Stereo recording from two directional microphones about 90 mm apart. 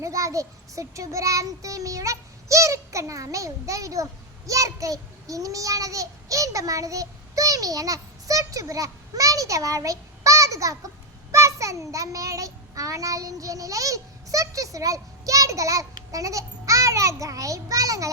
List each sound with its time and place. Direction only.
0.0 s child singing: 35° right (ahead or behind)
11.3 s a child's voice: 35° right (ahead or behind)